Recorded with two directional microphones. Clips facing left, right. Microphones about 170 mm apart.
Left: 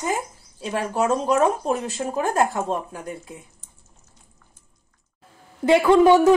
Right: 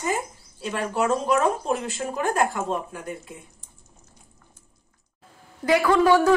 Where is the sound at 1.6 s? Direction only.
40° left (ahead or behind).